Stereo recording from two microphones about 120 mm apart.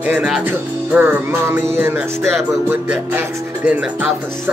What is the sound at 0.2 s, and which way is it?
Speech, 10° right (ahead or behind).